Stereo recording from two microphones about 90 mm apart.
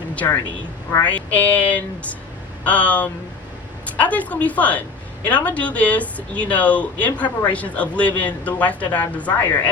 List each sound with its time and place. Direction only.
1.0 s speech: 15° left (ahead or behind)